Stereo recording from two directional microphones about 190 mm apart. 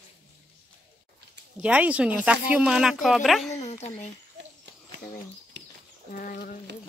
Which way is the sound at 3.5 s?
35° left (ahead or behind).